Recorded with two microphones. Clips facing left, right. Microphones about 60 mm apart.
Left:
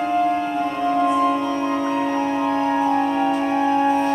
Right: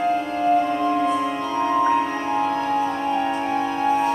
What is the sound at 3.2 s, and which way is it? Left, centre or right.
Music, centre.